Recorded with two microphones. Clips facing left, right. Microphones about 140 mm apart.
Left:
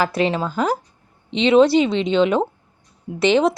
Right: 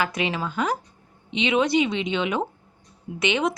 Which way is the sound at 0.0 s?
35° left (ahead or behind).